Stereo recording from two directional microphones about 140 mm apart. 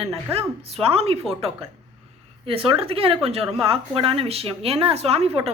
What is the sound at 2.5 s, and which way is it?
A woman's voice, 40° right (ahead or behind).